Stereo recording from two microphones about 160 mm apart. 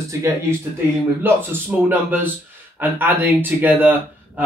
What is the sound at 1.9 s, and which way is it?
Speech, 10° right (ahead or behind).